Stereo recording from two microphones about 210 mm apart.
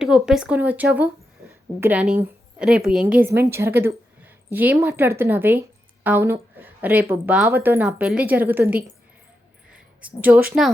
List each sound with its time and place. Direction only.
0.0 s a woman's voice: 5° right (ahead or behind)
10.0 s speech: 5° right (ahead or behind)